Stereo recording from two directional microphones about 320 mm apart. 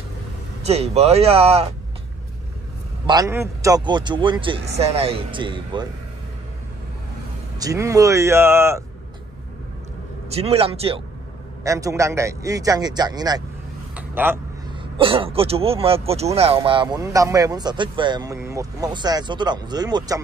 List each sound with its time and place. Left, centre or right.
0.7 s speech: centre
3.1 s speech: centre
7.5 s speech: centre
10.3 s speech: centre
13.9 s a sound: centre
15.0 s speech: centre